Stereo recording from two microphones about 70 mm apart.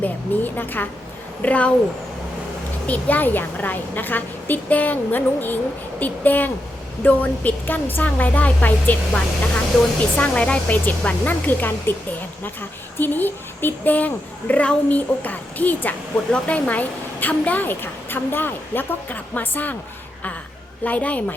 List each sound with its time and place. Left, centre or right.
0.0 s a woman's voice: left
2.8 s a woman's voice: left
9.7 s a woman's voice: centre; by 11.9 s left
13.0 s a woman's voice: left
20.8 s a woman's voice: left